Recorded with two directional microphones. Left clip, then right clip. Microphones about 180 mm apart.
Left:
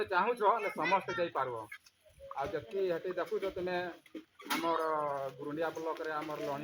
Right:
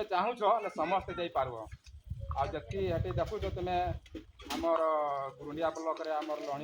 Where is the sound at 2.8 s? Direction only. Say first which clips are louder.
Right 2 dB; 30° right (ahead or behind).